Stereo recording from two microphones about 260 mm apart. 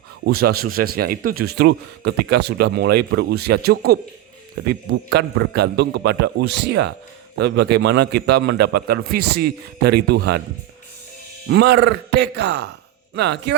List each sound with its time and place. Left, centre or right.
0.3 s a man's voice: right
11.4 s a man's voice: right